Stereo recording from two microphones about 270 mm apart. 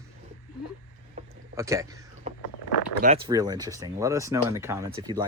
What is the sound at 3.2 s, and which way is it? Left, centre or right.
Speech, centre.